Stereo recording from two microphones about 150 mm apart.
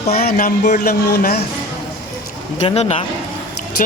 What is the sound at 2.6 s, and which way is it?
Speech, 45° left (ahead or behind).